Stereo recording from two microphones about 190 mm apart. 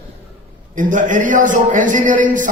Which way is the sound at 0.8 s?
45° right (ahead or behind).